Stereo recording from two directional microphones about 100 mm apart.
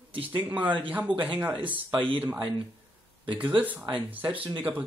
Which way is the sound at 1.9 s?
55° right (ahead or behind).